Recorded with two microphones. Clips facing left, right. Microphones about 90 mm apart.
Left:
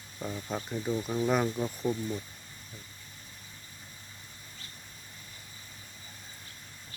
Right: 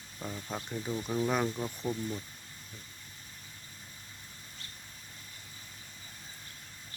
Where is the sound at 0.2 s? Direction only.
5° left (ahead or behind).